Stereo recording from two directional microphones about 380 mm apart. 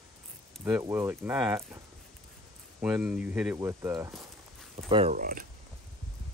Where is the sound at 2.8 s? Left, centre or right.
Centre.